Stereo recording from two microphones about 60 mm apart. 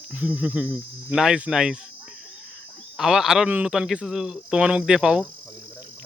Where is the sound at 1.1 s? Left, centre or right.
Centre.